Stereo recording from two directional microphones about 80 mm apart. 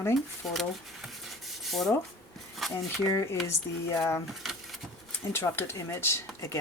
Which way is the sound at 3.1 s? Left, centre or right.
Left.